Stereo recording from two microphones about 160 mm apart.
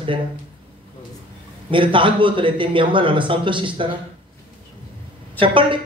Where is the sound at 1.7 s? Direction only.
30° right (ahead or behind).